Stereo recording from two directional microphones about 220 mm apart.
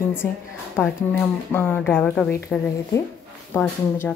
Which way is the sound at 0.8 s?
10° left (ahead or behind).